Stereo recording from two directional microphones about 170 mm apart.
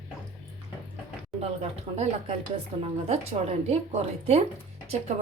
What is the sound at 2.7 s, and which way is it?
A woman's voice, 40° right (ahead or behind).